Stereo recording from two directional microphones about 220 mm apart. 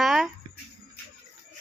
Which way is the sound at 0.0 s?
Centre (ahead or behind).